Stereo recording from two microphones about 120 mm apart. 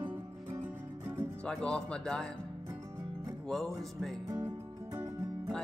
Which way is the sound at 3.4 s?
5° left (ahead or behind).